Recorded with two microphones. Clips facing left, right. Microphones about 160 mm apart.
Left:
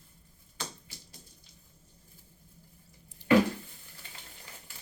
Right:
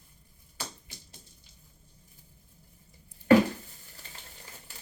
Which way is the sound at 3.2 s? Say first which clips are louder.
Right 4 dB; 90° left.